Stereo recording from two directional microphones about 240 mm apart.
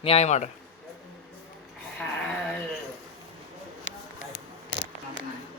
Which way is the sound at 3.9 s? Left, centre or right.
Left.